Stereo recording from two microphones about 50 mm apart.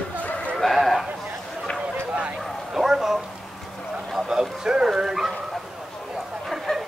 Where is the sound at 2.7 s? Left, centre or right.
Centre.